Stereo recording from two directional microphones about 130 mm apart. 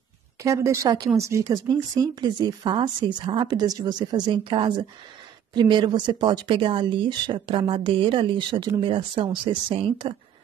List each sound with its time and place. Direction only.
0.4 s speech: 25° right (ahead or behind); by 10.1 s 40° right (ahead or behind)